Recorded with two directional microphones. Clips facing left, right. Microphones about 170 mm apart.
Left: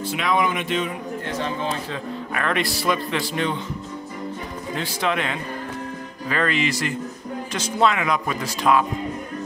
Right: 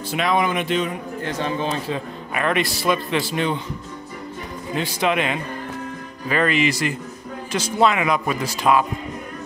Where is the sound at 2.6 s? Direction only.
Centre (ahead or behind).